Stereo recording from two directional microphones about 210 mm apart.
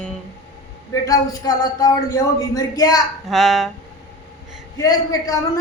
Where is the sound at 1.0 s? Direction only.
15° left (ahead or behind).